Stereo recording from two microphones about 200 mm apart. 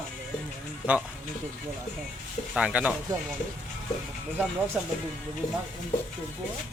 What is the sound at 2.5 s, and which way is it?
Speech, 5° right (ahead or behind).